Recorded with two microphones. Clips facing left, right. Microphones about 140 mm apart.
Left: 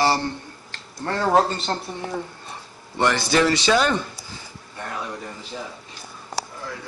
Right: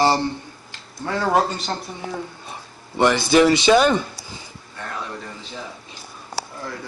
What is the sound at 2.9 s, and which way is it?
Speech, 15° right (ahead or behind).